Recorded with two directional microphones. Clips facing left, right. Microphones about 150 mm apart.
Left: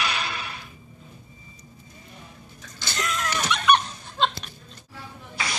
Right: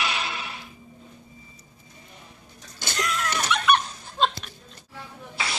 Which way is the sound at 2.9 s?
Centre (ahead or behind).